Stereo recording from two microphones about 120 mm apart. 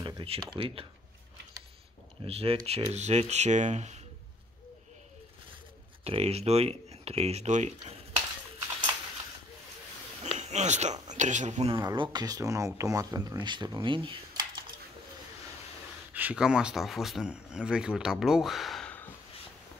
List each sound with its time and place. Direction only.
0.0 s speech: 45° right (ahead or behind)
2.2 s speech: 55° right (ahead or behind); by 4.0 s 70° right (ahead or behind)
6.0 s speech: 60° right (ahead or behind)
10.2 s speech: 70° right (ahead or behind)
11.7 s speech: 40° right (ahead or behind)
13.8 s a sound: 45° right (ahead or behind)
16.1 s speech: 15° right (ahead or behind)
18.9 s a sound: 15° left (ahead or behind)